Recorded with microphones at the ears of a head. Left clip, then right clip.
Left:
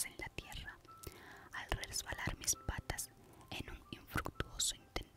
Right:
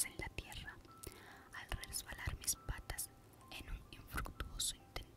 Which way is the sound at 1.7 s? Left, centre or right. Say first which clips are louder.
Left 7 dB; left.